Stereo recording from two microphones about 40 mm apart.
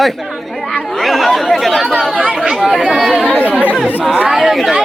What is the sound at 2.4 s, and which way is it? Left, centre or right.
Speech, centre.